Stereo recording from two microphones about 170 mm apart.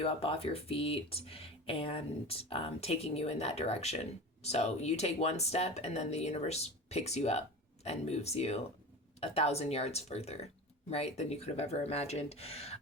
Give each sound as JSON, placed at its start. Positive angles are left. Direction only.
{"t": 0.0, "sound": "speech", "side_deg": 35}